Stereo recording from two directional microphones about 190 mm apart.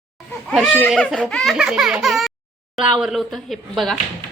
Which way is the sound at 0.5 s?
Centre (ahead or behind).